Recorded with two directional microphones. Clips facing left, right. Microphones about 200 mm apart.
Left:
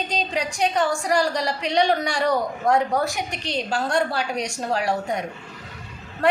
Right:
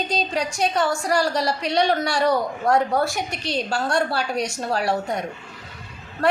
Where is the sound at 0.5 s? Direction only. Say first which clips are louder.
Left 1 dB; 15° left (ahead or behind).